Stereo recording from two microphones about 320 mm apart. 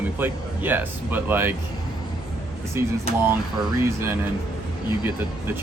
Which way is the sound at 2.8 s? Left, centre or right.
Centre.